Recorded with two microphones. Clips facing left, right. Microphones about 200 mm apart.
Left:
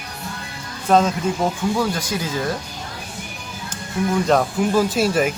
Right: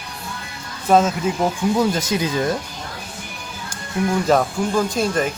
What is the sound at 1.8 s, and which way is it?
Speech, 20° right (ahead or behind).